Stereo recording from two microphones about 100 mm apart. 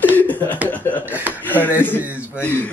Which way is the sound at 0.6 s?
15° left (ahead or behind).